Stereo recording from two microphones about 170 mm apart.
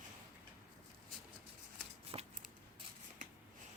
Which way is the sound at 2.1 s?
30° right (ahead or behind).